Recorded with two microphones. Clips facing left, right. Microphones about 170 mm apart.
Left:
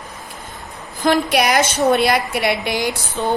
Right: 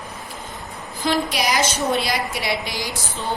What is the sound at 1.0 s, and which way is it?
A woman's voice, 60° left (ahead or behind).